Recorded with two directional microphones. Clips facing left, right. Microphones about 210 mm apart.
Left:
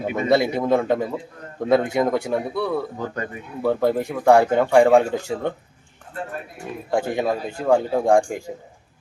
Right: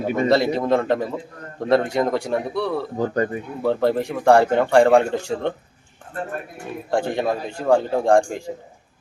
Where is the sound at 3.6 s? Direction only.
5° left (ahead or behind).